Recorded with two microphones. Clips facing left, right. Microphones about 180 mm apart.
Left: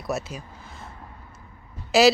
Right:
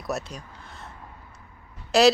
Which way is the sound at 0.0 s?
Centre (ahead or behind).